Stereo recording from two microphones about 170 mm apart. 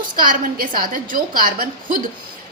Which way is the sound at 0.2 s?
55° right (ahead or behind).